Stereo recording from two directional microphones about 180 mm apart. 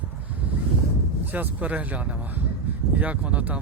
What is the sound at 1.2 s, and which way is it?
Speech, 10° right (ahead or behind).